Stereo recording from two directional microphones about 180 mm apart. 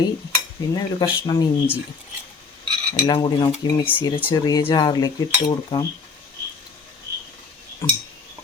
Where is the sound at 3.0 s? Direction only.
25° left (ahead or behind).